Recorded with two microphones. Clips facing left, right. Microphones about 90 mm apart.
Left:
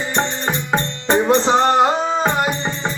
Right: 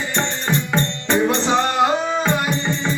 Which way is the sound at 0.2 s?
35° left (ahead or behind).